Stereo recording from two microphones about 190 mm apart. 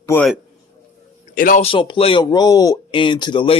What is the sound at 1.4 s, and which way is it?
Speech, 45° left (ahead or behind).